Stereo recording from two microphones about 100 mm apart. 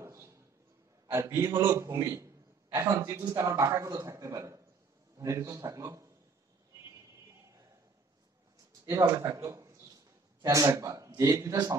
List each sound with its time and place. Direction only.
0.0 s a sound: 30° right (ahead or behind)
1.2 s a man's voice: 25° right (ahead or behind)
9.1 s a man's voice: 25° right (ahead or behind)